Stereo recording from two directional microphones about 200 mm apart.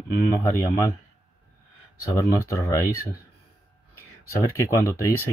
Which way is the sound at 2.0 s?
15° left (ahead or behind).